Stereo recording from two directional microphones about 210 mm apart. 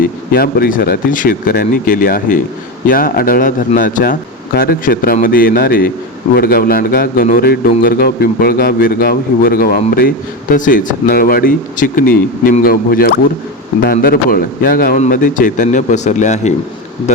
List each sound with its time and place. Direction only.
0.0 s a man's voice: 45° left (ahead or behind)